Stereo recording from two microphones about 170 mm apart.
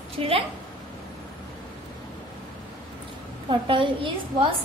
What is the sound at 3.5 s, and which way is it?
Speech, 30° right (ahead or behind).